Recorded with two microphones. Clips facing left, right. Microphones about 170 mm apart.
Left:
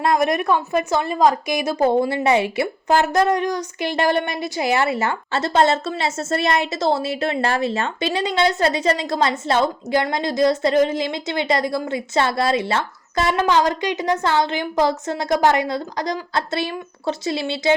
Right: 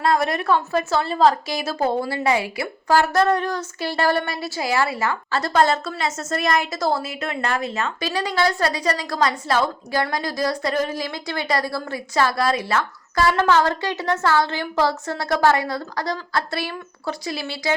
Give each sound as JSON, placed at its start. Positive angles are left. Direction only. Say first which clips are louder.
{"t": 0.0, "sound": "a woman's voice", "louder": "left 2 dB", "side_deg": 20}